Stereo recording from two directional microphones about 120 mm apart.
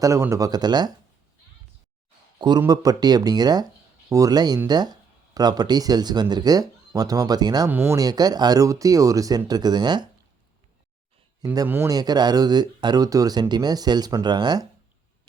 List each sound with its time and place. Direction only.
0.0 s speech: 25° right (ahead or behind)
2.6 s speech: 35° right (ahead or behind)
7.7 s speech: 20° right (ahead or behind); by 10.1 s 35° right (ahead or behind)
11.7 s speech: 25° right (ahead or behind)